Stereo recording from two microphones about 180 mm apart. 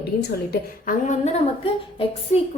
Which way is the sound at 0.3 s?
60° left (ahead or behind).